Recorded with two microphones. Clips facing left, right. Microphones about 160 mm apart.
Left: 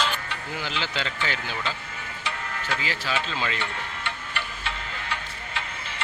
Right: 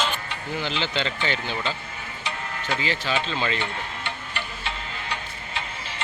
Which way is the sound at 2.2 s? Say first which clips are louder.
Right 1 dB; 20° right (ahead or behind).